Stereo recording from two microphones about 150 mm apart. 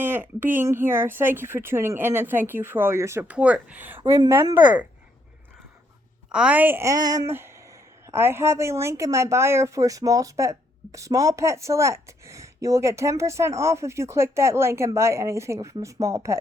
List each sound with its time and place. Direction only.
0.0 s speech: 15° right (ahead or behind)
4.0 s speech: 30° right (ahead or behind)
4.3 s speech: 15° right (ahead or behind)
6.3 s speech: 10° right (ahead or behind)